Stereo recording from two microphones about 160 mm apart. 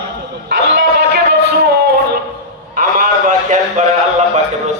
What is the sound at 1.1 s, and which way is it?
Music, 80° right.